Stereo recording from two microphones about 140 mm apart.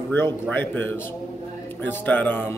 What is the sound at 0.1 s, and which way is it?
A man's voice, 15° left (ahead or behind).